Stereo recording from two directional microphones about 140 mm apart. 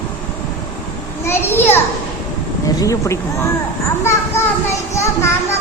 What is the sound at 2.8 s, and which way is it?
Speech, 20° left (ahead or behind).